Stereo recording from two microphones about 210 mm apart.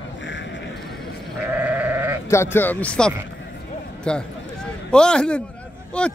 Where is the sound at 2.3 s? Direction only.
10° left (ahead or behind).